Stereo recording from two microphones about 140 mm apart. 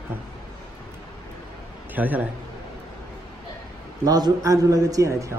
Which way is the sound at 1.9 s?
10° right (ahead or behind).